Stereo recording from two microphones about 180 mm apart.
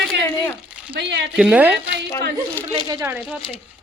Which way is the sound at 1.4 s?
5° right (ahead or behind).